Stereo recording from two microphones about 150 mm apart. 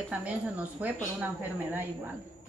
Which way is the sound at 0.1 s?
10° right (ahead or behind).